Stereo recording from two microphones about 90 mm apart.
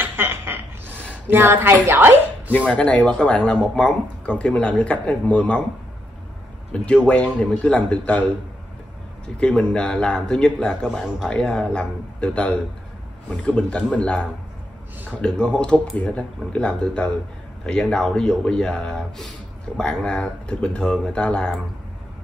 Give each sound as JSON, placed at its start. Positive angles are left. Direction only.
{"t": 0.0, "sound": "a sound", "side_deg": -25}
{"t": 1.3, "sound": "speech", "side_deg": -25}
{"t": 2.5, "sound": "speech", "side_deg": 15}
{"t": 6.7, "sound": "speech", "side_deg": 10}
{"t": 9.4, "sound": "speech", "side_deg": 10}